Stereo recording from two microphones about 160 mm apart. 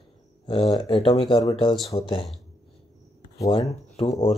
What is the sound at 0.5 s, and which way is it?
Speech, 30° left (ahead or behind).